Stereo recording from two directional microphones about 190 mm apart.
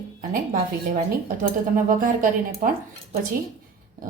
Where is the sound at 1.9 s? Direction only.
45° right (ahead or behind).